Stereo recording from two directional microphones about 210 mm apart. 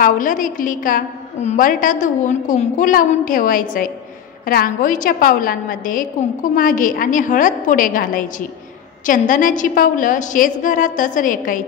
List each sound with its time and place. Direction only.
0.0 s a woman's voice: 40° left (ahead or behind)